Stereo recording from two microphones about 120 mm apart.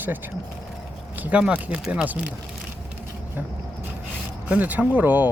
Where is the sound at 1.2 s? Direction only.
10° right (ahead or behind).